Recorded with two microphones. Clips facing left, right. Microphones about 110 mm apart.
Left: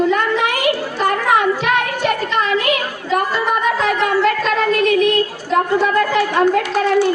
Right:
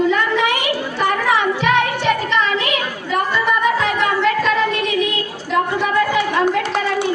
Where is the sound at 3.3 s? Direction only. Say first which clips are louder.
Even; 45° left (ahead or behind).